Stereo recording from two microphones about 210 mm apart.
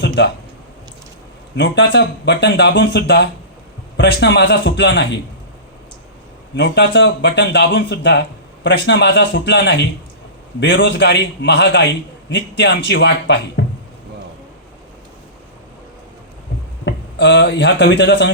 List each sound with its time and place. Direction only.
1.5 s a man's voice: 55° left (ahead or behind)
6.6 s a man's voice: 55° left (ahead or behind)
16.8 s speech: 55° left (ahead or behind)